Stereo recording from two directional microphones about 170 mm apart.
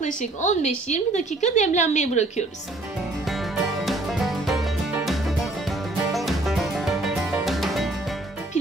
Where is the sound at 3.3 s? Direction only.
Centre (ahead or behind).